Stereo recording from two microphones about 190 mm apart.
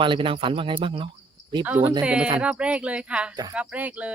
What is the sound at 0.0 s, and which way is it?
Speech, 25° right (ahead or behind).